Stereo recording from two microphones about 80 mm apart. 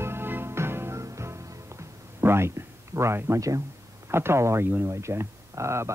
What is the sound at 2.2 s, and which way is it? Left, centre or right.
Speech, right.